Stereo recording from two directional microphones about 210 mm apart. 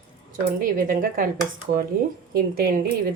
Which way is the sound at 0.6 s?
40° right (ahead or behind).